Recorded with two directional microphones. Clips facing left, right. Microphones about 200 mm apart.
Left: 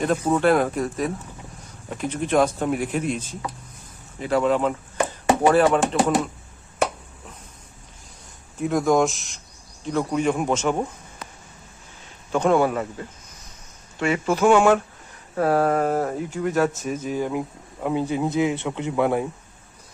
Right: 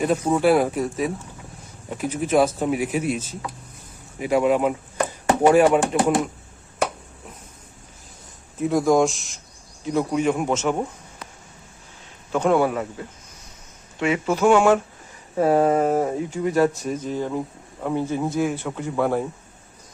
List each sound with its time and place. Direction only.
0.0 s speech: 10° right (ahead or behind)
8.5 s speech: centre (ahead or behind)
12.3 s speech: 5° right (ahead or behind); by 19.2 s 15° left (ahead or behind)